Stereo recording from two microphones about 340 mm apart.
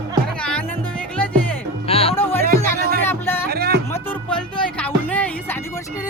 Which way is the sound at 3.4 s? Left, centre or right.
Right.